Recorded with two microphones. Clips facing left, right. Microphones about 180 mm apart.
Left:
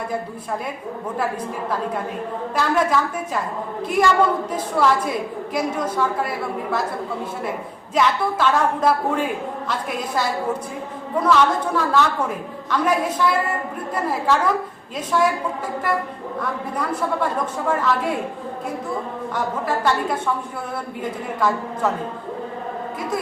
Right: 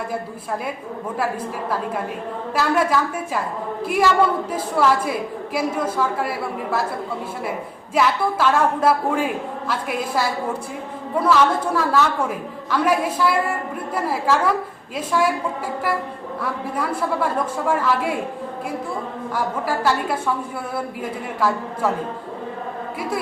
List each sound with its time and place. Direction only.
2.6 s a woman's voice: 5° right (ahead or behind)
7.9 s a woman's voice: 5° right (ahead or behind)
16.4 s a woman's voice: 5° right (ahead or behind)
19.3 s a woman's voice: 5° right (ahead or behind)